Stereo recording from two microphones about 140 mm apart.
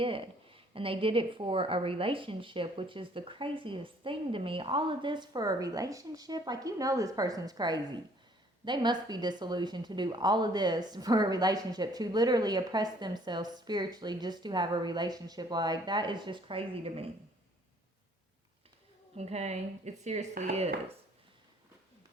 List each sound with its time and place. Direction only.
0.0 s speech: 40° right (ahead or behind)
19.1 s speech: 50° right (ahead or behind); by 20.7 s 75° right (ahead or behind)